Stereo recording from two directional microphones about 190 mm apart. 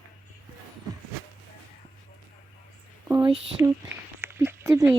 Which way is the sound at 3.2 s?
25° right (ahead or behind).